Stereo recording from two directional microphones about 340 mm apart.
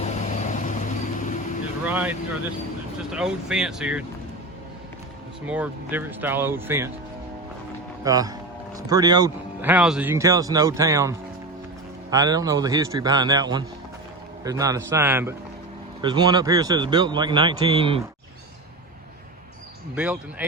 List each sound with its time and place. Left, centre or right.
0.0 s vehicle: left
1.8 s speech: centre
5.5 s speech: centre
8.0 s speech: centre
12.1 s speech: centre